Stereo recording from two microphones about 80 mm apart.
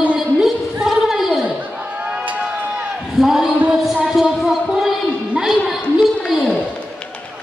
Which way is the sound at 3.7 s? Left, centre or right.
Centre.